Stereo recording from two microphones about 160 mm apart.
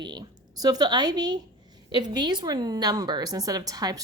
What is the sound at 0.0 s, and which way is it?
A woman's voice, 30° right (ahead or behind).